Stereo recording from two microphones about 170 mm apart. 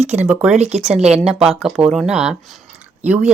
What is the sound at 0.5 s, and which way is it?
Speech, 40° right (ahead or behind).